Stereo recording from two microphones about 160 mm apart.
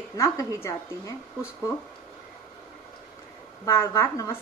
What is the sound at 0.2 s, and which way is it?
A woman's voice, 20° left (ahead or behind).